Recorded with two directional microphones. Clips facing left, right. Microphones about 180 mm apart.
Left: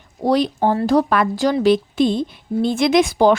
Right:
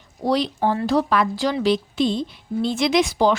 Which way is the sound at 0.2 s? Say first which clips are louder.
Left 4 dB; 50° left (ahead or behind).